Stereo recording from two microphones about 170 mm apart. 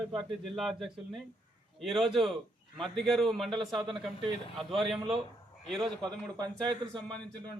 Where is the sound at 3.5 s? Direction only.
25° right (ahead or behind).